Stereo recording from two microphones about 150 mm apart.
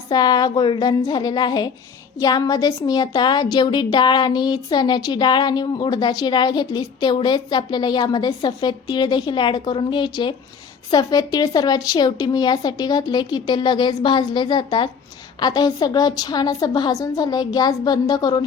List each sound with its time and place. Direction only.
0.1 s speech: 25° left (ahead or behind)